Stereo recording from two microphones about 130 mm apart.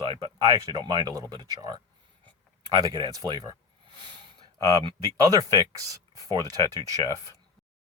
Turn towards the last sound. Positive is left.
turn(degrees=-25)  # may be behind; listen again after turning